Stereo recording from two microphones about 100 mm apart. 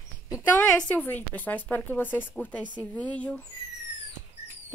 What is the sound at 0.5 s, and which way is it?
Speech, 15° left (ahead or behind).